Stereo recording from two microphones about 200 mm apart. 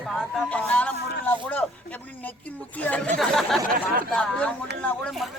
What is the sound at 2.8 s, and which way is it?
Speech, 5° left (ahead or behind).